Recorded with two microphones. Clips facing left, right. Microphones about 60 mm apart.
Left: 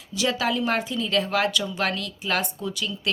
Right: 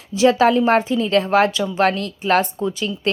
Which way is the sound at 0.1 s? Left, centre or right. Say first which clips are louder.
Right 10 dB; right.